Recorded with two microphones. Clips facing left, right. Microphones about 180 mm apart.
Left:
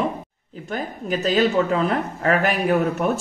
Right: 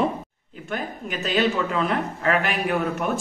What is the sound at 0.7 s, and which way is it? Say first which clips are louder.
Speech: left 4 dB; 40° left (ahead or behind).